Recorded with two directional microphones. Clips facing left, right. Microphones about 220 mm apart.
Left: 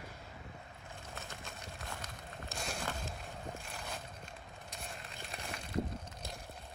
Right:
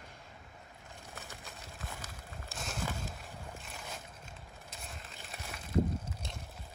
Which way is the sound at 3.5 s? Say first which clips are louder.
Left 2 dB; centre (ahead or behind).